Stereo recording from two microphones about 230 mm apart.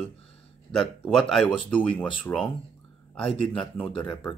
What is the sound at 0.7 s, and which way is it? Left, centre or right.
Speech, centre.